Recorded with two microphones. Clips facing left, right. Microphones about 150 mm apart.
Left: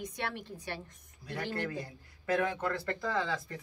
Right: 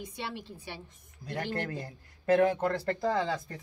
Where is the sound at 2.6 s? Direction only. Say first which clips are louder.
Right 5 dB; 40° right (ahead or behind).